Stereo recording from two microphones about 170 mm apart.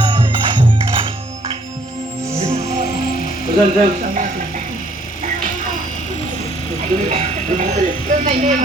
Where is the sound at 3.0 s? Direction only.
60° left (ahead or behind).